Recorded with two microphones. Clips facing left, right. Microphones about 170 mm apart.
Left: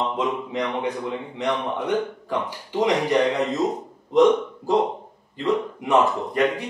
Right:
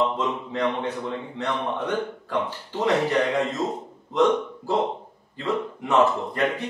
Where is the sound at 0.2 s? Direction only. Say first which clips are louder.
Even; 15° left (ahead or behind).